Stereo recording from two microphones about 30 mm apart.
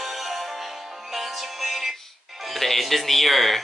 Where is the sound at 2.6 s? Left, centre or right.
Centre.